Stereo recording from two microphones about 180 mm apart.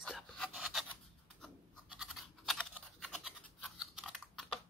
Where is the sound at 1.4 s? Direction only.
Centre (ahead or behind).